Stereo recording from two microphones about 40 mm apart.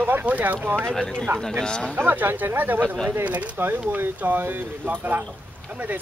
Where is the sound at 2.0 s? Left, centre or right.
Right.